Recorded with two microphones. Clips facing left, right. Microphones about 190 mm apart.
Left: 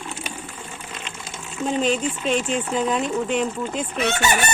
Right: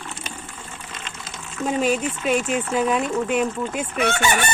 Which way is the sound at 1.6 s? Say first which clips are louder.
Even; 5° right (ahead or behind).